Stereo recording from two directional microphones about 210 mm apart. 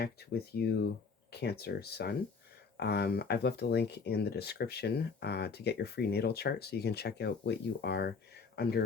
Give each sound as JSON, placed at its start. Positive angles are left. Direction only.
{"t": 0.0, "sound": "speech", "side_deg": 50}